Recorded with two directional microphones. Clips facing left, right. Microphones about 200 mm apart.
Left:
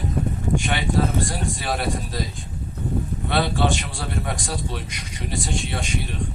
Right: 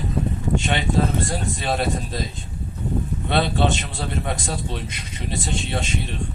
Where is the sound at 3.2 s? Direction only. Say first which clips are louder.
Right 1 dB; 20° right (ahead or behind).